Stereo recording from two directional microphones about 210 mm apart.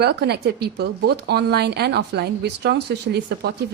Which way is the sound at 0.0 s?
50° right (ahead or behind).